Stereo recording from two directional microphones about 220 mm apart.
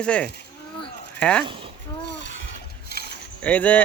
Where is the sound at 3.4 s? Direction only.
5° left (ahead or behind).